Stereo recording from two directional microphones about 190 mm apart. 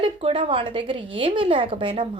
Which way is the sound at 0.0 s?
30° right (ahead or behind).